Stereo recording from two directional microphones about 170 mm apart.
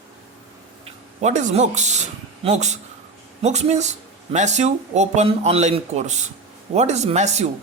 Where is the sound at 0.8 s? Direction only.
40° right (ahead or behind).